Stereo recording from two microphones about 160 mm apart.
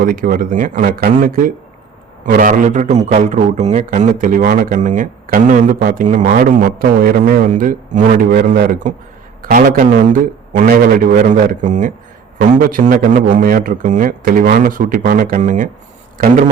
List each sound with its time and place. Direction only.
0.0 s a man's voice: 60° right (ahead or behind)